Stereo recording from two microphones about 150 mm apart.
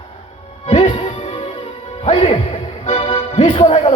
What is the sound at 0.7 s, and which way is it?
Music, 40° left (ahead or behind).